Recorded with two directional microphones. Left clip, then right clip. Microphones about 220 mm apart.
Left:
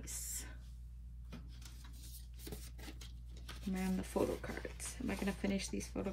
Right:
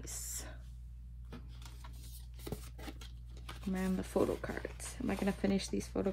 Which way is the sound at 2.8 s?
25° right (ahead or behind).